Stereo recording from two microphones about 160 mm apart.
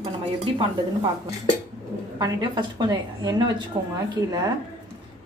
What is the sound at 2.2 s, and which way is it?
A woman's voice, 25° right (ahead or behind).